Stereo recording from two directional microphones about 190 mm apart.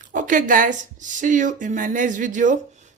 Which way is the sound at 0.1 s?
45° right (ahead or behind).